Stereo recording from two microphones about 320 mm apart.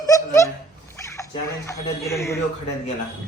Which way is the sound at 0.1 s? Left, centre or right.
Centre.